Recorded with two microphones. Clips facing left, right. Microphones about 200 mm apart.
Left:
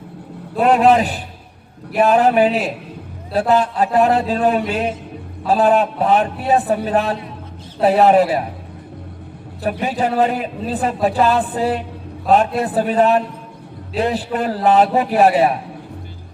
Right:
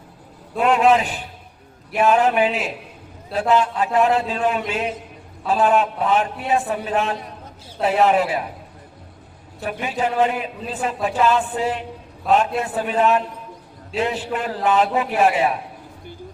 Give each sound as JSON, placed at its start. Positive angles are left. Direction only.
{"t": 0.5, "sound": "speech", "side_deg": 35}
{"t": 9.8, "sound": "speech", "side_deg": 35}